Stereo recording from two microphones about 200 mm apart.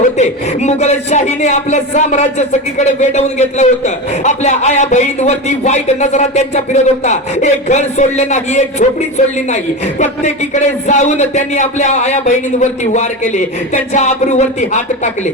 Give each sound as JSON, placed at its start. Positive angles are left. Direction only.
{"t": 0.2, "sound": "speech", "side_deg": 35}